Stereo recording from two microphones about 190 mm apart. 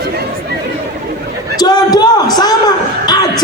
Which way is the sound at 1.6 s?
20° left (ahead or behind).